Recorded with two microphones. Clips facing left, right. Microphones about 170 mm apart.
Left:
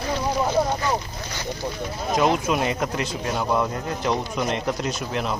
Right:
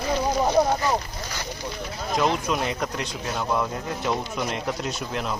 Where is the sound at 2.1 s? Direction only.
5° left (ahead or behind).